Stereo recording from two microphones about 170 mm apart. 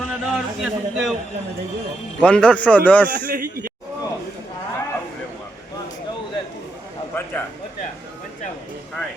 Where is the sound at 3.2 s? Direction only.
60° right (ahead or behind).